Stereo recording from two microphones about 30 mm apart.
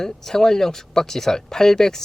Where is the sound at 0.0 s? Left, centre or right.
Centre.